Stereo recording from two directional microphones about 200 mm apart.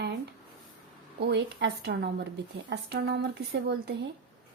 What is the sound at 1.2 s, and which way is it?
A woman's voice, 60° right (ahead or behind).